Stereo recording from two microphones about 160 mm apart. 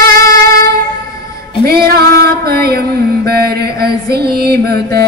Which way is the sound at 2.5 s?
75° right (ahead or behind).